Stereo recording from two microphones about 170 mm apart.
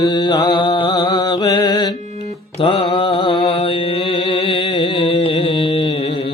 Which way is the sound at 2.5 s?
35° left (ahead or behind).